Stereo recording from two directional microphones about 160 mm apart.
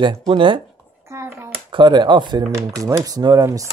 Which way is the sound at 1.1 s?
15° right (ahead or behind).